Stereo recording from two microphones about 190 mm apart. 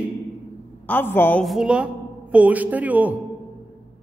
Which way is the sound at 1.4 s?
5° right (ahead or behind).